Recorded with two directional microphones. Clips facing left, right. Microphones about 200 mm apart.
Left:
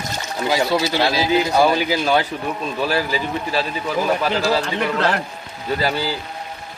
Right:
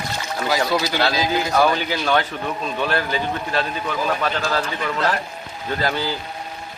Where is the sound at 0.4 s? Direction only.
20° left (ahead or behind).